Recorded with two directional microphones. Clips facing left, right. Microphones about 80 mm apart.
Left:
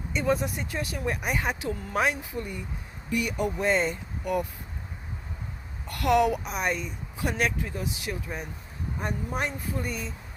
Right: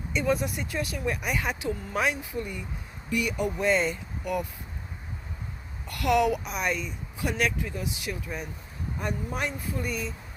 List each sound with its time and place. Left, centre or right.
0.1 s speech: left
5.9 s speech: left